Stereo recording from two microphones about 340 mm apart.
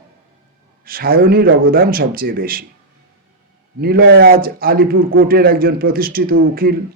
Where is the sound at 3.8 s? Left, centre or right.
Right.